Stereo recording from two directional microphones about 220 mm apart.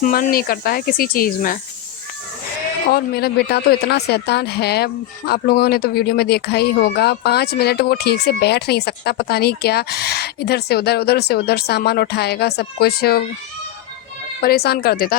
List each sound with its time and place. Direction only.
0.0 s speech: 40° left (ahead or behind)
2.8 s speech: 45° left (ahead or behind)
14.4 s speech: 45° left (ahead or behind)